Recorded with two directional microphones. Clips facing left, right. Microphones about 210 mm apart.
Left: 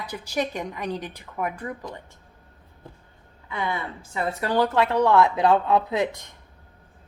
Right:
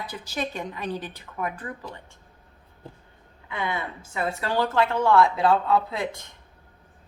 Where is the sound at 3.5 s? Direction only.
20° right (ahead or behind).